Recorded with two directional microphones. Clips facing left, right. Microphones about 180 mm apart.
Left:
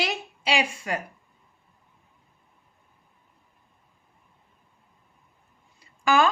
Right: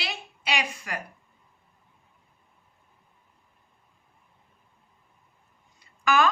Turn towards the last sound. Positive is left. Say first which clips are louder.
# left 2 dB
turn(degrees=30)  # may be behind; listen again after turning